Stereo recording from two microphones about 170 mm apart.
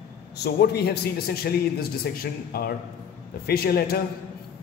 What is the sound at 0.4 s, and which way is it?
A man's voice, 70° left (ahead or behind).